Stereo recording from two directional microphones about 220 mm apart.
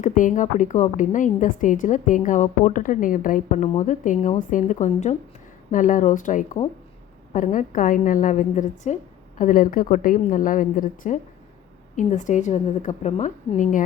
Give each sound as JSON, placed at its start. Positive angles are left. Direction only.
{"t": 0.0, "sound": "a woman's voice", "side_deg": 35}